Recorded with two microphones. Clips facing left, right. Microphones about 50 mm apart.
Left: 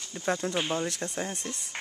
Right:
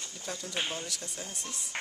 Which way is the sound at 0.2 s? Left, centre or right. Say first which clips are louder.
Left 7 dB; left.